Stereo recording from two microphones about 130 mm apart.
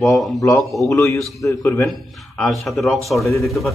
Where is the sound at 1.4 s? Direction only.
25° left (ahead or behind).